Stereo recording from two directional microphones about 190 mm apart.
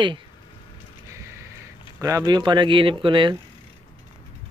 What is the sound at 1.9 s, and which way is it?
Speech, 15° right (ahead or behind).